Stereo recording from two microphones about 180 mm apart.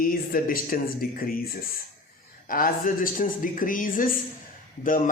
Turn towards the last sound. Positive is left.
turn(degrees=50)  # may be behind; listen again after turning